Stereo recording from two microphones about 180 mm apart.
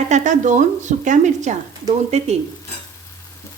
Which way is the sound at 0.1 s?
40° right (ahead or behind).